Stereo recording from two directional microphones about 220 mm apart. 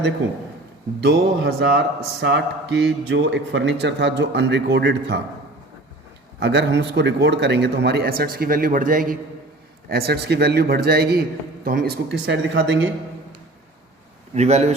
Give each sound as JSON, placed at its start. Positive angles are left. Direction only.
{"t": 1.0, "sound": "speech", "side_deg": -50}
{"t": 6.4, "sound": "speech", "side_deg": -50}
{"t": 14.3, "sound": "speech", "side_deg": -30}